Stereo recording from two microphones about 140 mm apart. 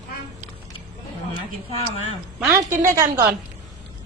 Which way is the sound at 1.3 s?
40° left (ahead or behind).